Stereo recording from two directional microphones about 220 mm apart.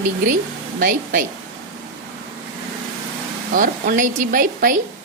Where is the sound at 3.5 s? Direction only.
35° right (ahead or behind).